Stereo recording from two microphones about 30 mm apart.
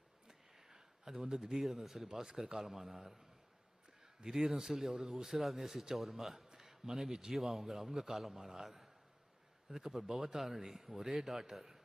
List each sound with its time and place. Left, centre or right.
0.3 s a sound: centre
1.6 s speech: centre
2.0 s speech: centre
7.3 s speech: centre